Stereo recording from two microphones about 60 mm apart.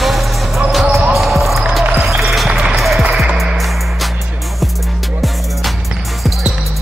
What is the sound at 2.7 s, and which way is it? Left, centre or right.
Music, centre.